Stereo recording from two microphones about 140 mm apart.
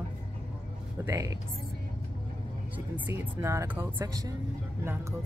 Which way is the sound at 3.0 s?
15° right (ahead or behind).